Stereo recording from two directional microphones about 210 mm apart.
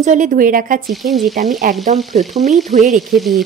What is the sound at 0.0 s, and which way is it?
Speech, 35° right (ahead or behind).